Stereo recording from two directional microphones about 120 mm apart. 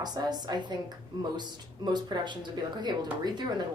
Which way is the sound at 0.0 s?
35° right (ahead or behind).